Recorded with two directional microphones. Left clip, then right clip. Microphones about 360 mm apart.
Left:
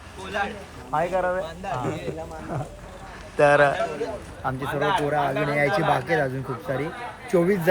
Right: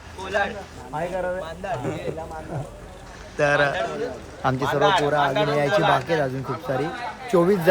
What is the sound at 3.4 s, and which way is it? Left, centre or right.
Speech, centre.